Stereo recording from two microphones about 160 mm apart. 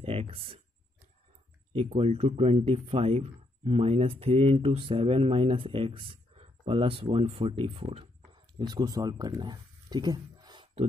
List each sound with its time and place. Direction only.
0.0 s a sound: 40° right (ahead or behind)
1.7 s speech: 35° right (ahead or behind)
8.5 s speech: 25° right (ahead or behind)